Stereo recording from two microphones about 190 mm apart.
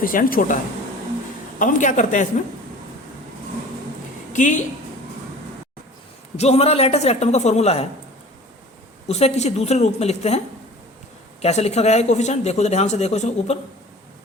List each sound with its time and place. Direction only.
0.0 s speech: 45° left (ahead or behind)
4.3 s a woman's voice: 40° left (ahead or behind)
6.3 s speech: 35° left (ahead or behind)
9.0 s speech: 35° left (ahead or behind)
11.4 s speech: 35° left (ahead or behind)